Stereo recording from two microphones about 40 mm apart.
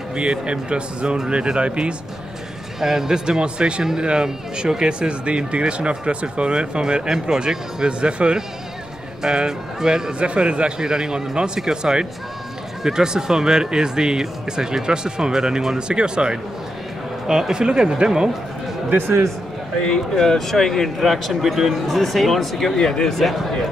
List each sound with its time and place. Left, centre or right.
0.1 s speech: right
2.8 s speech: centre
10.1 s speech: right
20.2 s speech: centre
21.0 s speech: centre
23.1 s speech: centre